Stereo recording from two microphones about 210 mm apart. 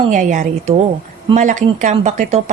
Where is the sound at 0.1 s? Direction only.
35° right (ahead or behind).